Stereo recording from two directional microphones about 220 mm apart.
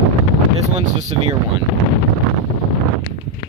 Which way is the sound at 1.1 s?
25° right (ahead or behind).